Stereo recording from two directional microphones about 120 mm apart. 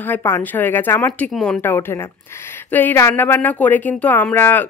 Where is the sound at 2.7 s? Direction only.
20° left (ahead or behind).